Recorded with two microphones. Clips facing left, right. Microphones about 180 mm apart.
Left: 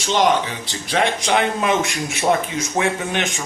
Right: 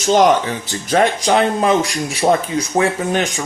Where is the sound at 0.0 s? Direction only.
45° right (ahead or behind).